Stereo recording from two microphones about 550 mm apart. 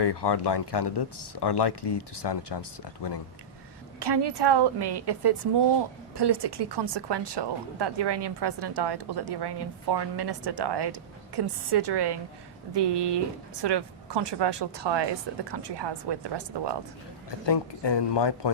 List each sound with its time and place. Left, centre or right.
0.0 s speech: left
4.0 s speech: right
17.4 s speech: left